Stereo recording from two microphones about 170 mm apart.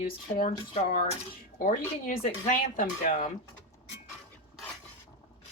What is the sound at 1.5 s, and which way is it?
Speech, 55° left (ahead or behind).